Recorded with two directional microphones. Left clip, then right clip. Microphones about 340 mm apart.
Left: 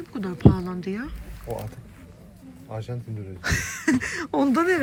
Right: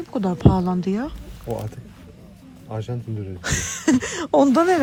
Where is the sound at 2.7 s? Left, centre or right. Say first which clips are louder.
Right 4 dB; right.